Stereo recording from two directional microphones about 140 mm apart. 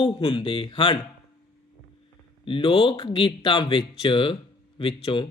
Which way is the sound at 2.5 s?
40° left (ahead or behind).